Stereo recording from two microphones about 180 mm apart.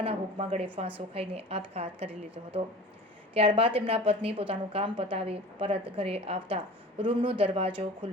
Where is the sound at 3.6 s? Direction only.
30° right (ahead or behind).